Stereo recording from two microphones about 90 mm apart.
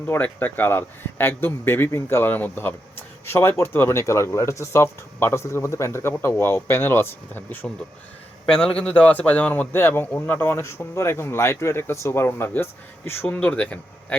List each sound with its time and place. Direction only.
0.1 s a man's voice: 20° left (ahead or behind)